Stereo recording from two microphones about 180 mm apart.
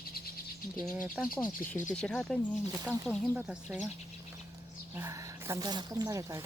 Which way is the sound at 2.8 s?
5° right (ahead or behind).